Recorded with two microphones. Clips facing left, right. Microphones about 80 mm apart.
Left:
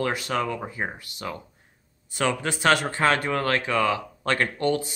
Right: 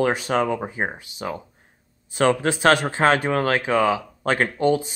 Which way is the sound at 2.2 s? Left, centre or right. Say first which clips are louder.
Right 6 dB; right.